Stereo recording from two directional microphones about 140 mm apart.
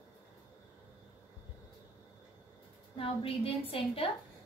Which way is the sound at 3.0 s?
40° left (ahead or behind).